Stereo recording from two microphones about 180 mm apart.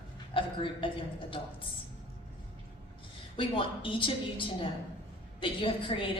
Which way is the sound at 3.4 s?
30° left (ahead or behind).